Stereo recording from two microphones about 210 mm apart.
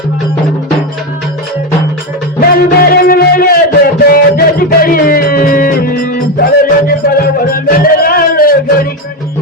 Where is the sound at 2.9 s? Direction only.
45° left (ahead or behind).